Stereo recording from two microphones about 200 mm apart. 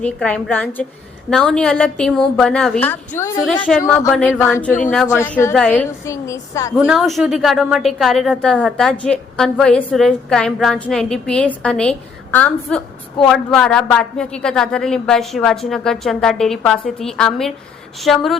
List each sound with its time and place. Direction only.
0.0 s a woman's voice: 5° left (ahead or behind)
6.1 s a woman's voice: 15° left (ahead or behind)
6.7 s a woman's voice: centre (ahead or behind)